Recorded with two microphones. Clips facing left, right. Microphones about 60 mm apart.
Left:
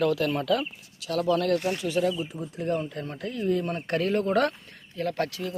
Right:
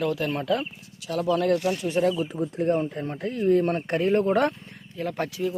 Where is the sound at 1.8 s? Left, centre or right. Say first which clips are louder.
Right 2 dB; right.